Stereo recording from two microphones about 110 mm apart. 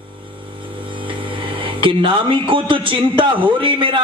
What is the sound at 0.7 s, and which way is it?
Speech, 50° right (ahead or behind).